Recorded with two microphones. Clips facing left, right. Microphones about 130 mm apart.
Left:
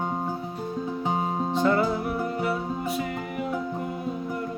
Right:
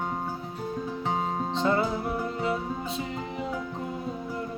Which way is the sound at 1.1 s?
15° left (ahead or behind).